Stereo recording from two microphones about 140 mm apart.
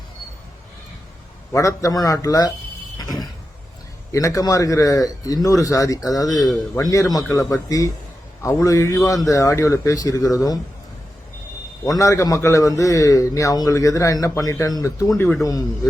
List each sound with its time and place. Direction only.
1.5 s a man's voice: 25° left (ahead or behind)
3.0 s a sound: 30° left (ahead or behind)
4.1 s a man's voice: 20° left (ahead or behind)
11.9 s a man's voice: 25° left (ahead or behind)